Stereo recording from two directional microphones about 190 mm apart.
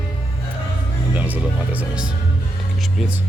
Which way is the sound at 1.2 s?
10° right (ahead or behind).